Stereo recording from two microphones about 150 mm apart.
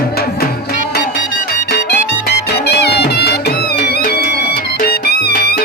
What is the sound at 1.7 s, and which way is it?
Music, 90° left.